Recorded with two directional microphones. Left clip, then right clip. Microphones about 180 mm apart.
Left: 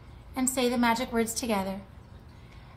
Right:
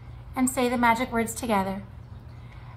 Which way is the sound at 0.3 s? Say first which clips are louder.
Right 3 dB; 15° right (ahead or behind).